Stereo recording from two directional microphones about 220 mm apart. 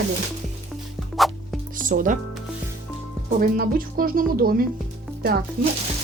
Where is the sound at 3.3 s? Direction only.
40° right (ahead or behind).